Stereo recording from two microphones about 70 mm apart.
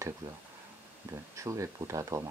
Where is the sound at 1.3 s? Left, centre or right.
Right.